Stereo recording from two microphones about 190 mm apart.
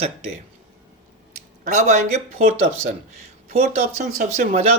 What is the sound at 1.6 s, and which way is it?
Speech, 40° right (ahead or behind).